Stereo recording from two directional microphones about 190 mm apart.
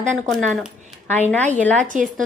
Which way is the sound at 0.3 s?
Centre (ahead or behind).